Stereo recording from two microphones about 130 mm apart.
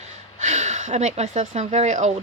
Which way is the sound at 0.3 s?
65° right (ahead or behind).